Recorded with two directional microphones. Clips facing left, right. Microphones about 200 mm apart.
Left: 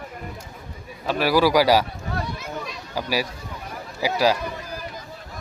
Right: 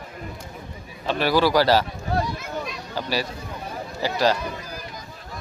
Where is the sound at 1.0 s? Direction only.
5° left (ahead or behind).